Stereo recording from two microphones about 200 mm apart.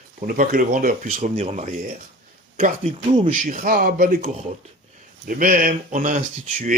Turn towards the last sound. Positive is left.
turn(degrees=-40)  # may be behind; listen again after turning